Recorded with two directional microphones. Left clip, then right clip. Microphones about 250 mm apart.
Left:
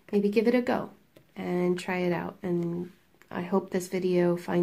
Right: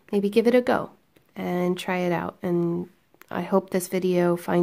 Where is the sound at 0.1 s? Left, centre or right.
Right.